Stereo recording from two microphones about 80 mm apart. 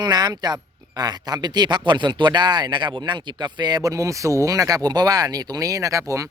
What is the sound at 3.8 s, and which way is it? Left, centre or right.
Speech, right.